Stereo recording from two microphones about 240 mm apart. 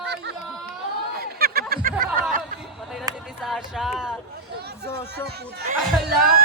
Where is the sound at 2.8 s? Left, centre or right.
Centre.